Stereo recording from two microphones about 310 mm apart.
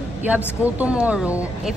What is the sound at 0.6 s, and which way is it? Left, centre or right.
Speech, centre.